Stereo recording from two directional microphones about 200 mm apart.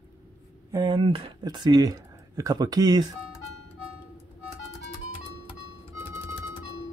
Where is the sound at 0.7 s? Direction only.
20° right (ahead or behind).